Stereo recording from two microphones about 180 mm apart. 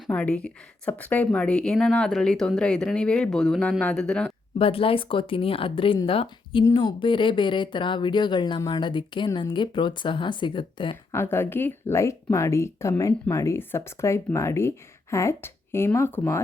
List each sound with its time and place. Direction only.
0.1 s a woman's voice: 5° left (ahead or behind)
4.5 s speech: 30° left (ahead or behind)
11.1 s speech: 15° left (ahead or behind)